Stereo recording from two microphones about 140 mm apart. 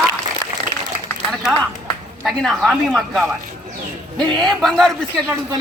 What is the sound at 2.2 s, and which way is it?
Speech, centre (ahead or behind).